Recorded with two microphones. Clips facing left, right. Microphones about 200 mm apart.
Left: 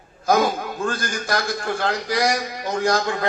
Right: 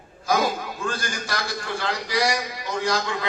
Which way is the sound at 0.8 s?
50° left (ahead or behind).